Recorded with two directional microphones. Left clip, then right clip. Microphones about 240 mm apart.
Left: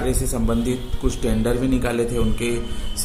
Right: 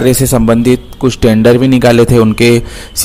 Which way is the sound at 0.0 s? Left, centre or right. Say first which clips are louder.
Right 15 dB; right.